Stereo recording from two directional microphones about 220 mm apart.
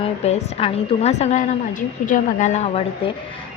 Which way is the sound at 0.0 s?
30° left (ahead or behind).